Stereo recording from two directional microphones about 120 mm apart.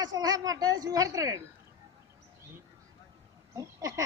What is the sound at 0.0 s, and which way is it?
A woman's voice, 35° right (ahead or behind).